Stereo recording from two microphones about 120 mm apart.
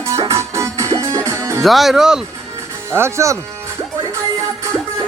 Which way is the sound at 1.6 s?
Centre (ahead or behind).